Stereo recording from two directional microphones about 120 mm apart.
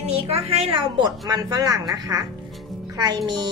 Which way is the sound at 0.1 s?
55° right (ahead or behind).